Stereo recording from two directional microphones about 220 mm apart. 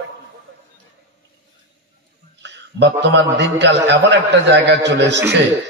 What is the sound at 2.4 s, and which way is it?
A man's voice, 50° right (ahead or behind).